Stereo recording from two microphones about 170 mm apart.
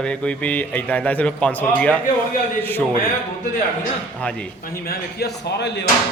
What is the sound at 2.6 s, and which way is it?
Speech, 10° left (ahead or behind).